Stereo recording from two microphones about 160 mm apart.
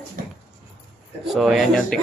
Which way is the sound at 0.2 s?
60° right (ahead or behind).